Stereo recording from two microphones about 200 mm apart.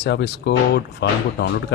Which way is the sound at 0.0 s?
60° left (ahead or behind).